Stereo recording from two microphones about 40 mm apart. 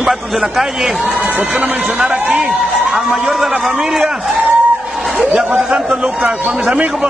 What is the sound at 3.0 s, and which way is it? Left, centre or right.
A man's voice, centre.